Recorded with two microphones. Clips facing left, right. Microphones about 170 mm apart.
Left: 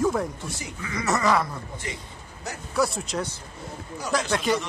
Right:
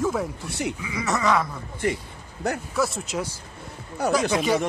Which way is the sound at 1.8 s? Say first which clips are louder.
Right 13 dB; 55° right (ahead or behind).